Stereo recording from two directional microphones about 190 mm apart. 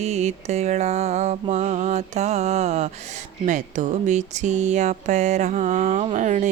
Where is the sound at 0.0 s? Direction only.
35° right (ahead or behind).